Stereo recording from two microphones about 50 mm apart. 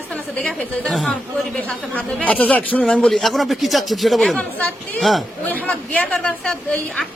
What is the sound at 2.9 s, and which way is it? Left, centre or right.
Speech, centre.